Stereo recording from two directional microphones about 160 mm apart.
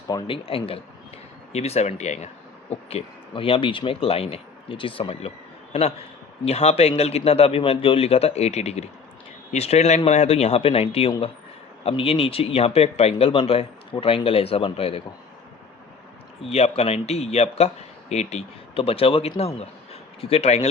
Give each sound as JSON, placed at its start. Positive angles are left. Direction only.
{"t": 0.1, "sound": "speech", "side_deg": 30}
{"t": 16.5, "sound": "a man's voice", "side_deg": 40}